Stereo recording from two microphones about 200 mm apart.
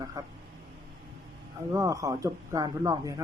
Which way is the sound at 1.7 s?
15° right (ahead or behind).